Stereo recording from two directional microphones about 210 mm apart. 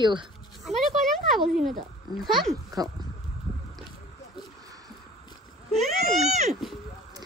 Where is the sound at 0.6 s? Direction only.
Centre (ahead or behind).